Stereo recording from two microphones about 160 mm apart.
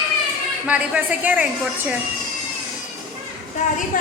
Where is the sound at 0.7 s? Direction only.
10° right (ahead or behind).